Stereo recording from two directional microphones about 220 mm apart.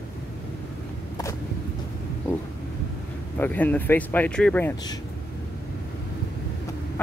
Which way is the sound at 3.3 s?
5° left (ahead or behind).